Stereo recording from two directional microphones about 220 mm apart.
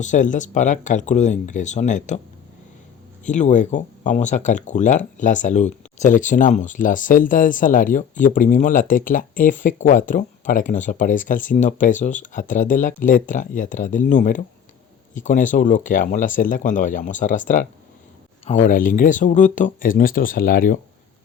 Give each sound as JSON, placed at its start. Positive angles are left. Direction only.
{"t": 0.0, "sound": "speech", "side_deg": 35}
{"t": 3.2, "sound": "speech", "side_deg": 35}